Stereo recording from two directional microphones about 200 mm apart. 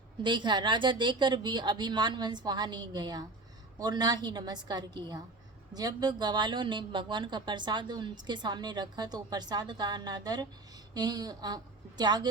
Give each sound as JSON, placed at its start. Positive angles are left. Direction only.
{"t": 0.2, "sound": "a woman's voice", "side_deg": -25}